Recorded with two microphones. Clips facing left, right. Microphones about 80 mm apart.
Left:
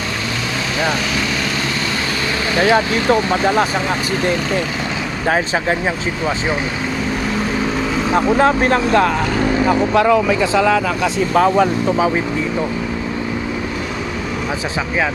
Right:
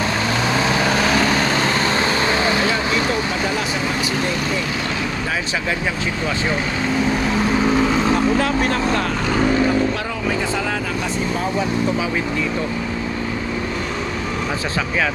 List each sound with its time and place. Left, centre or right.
2.7 s speech: left
7.8 s vehicle: centre
8.4 s speech: left
9.9 s speech: left
11.3 s speech: left